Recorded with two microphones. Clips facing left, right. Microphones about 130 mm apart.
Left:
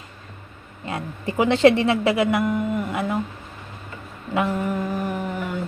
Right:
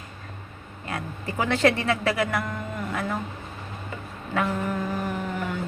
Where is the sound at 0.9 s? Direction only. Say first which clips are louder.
Left 4 dB; 25° left (ahead or behind).